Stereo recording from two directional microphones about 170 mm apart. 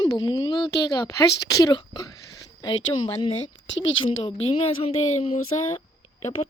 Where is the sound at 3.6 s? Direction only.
90° left.